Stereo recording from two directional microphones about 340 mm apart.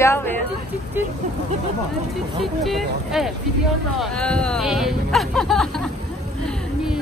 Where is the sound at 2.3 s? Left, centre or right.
Centre.